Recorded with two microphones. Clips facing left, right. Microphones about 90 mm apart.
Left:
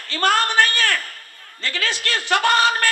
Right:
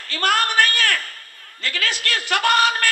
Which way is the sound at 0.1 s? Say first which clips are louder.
Left 2 dB; 25° left (ahead or behind).